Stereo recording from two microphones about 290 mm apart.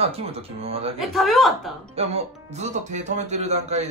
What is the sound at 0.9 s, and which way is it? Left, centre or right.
Speech, centre.